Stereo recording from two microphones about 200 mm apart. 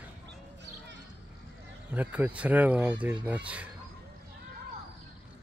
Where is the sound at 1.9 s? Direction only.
5° right (ahead or behind).